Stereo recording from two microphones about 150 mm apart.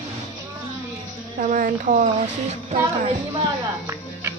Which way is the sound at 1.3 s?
60° right (ahead or behind).